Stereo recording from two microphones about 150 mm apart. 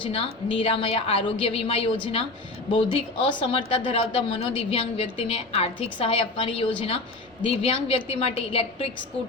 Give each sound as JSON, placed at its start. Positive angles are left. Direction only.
{"t": 0.0, "sound": "speech", "side_deg": 35}